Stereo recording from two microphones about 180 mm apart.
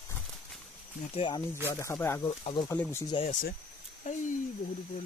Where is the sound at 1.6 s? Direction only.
15° left (ahead or behind).